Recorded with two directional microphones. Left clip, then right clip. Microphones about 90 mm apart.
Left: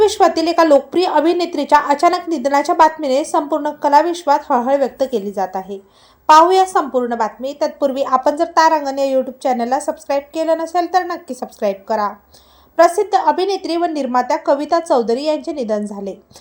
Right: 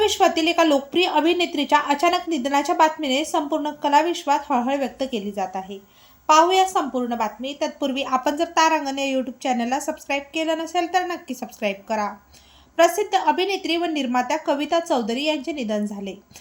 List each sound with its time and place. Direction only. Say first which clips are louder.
0.0 s a woman's voice: left 5 dB; 30° left (ahead or behind)
7.8 s speech: left 8 dB; 20° left (ahead or behind)